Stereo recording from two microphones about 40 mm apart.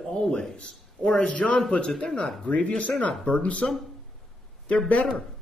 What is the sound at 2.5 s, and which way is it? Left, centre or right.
A man's voice, left.